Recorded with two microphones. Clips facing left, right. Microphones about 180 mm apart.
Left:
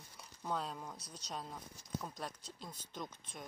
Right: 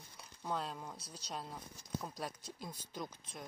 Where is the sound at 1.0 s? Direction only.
30° right (ahead or behind).